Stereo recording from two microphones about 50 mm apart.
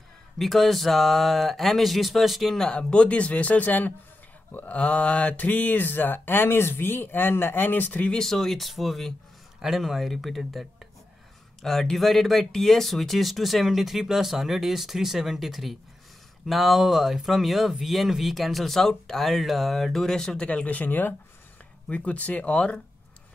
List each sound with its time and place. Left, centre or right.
0.4 s speech: centre
2.5 s speech: centre; by 8.1 s left
8.1 s speech: centre
9.6 s speech: centre
20.4 s speech: left
21.8 s speech: left